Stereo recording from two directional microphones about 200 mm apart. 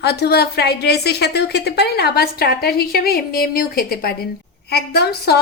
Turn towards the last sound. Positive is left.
turn(degrees=55)  # may be behind; listen again after turning